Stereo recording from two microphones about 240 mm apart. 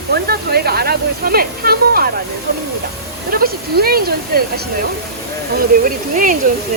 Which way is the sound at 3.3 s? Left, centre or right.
Right.